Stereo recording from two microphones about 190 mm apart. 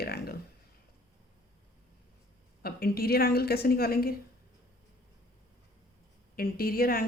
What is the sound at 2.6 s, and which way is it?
A woman's voice, 55° left (ahead or behind).